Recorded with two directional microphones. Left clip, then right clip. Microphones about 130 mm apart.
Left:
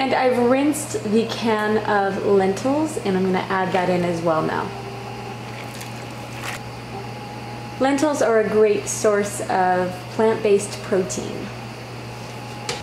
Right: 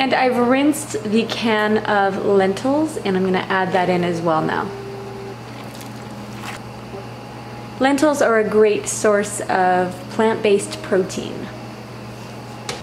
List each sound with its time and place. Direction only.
0.0 s a woman's voice: 35° right (ahead or behind)
7.8 s a woman's voice: 45° right (ahead or behind)